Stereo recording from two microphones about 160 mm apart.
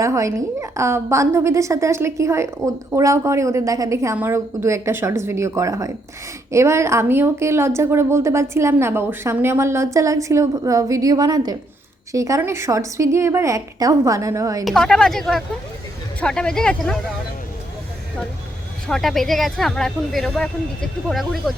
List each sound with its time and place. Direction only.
0.0 s a woman's voice: 20° right (ahead or behind)
14.6 s speech: centre (ahead or behind)
18.9 s speech: centre (ahead or behind)